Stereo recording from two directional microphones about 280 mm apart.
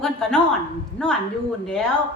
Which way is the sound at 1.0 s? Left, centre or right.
Centre.